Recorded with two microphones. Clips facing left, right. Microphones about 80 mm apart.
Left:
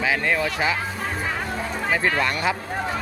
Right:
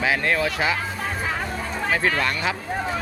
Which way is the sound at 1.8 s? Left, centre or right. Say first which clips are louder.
Even; centre.